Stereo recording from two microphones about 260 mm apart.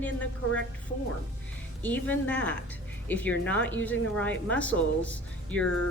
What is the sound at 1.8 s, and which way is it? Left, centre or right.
Speech, centre.